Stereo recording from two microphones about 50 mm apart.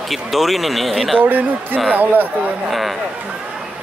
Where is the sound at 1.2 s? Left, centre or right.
Right.